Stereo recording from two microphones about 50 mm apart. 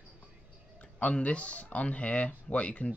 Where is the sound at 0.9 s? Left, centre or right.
Left.